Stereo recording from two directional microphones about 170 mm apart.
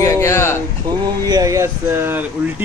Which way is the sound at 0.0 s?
15° left (ahead or behind).